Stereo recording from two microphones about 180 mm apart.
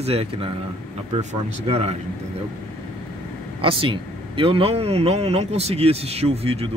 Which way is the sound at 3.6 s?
30° right (ahead or behind).